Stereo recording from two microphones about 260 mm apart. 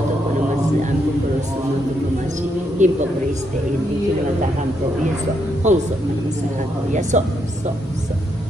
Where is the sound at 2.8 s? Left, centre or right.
Right.